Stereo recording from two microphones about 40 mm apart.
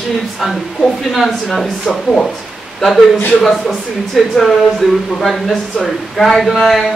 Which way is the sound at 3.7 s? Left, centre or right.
Centre.